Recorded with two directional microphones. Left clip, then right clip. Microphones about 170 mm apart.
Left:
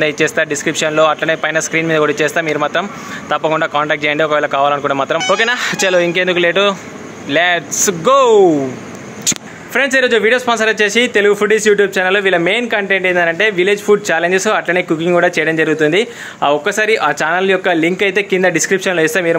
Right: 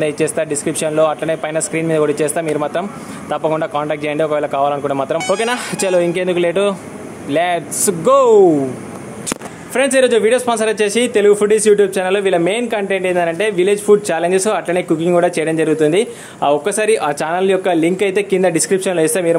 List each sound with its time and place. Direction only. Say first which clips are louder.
0.0 s speech: left 3 dB; 5° right (ahead or behind)
9.8 s a man's voice: even; centre (ahead or behind)